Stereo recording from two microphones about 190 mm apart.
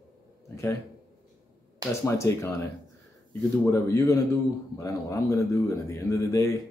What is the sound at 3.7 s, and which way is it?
Speech, 15° left (ahead or behind).